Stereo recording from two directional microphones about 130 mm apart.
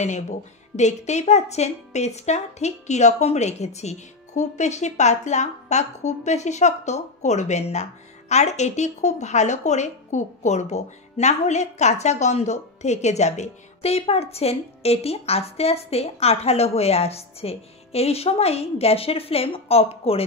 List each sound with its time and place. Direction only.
0.7 s a woman's voice: 60° left (ahead or behind)